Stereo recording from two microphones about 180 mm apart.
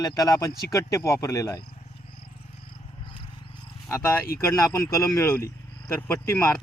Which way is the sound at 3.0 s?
30° left (ahead or behind).